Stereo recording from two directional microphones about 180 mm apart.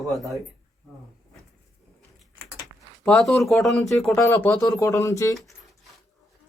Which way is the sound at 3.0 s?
Centre (ahead or behind).